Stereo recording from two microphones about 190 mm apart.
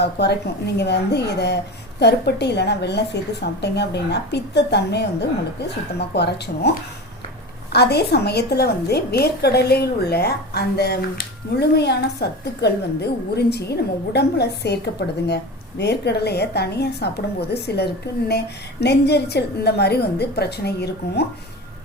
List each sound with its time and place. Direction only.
0.0 s a woman's voice: 60° left (ahead or behind)